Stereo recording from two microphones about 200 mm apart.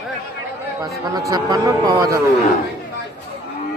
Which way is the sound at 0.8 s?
20° right (ahead or behind).